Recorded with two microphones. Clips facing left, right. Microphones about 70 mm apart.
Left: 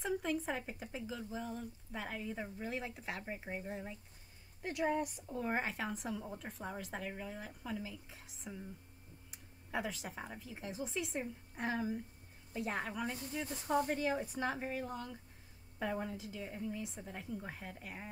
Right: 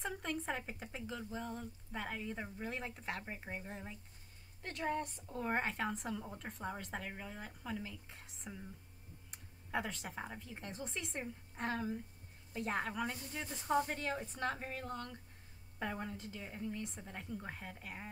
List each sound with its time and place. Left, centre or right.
0.0 s a woman's voice: centre
4.6 s a woman's voice: centre